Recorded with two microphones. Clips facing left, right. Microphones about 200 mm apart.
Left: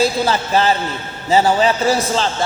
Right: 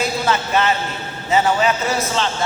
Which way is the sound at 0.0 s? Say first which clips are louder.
Left 4 dB; 35° left (ahead or behind).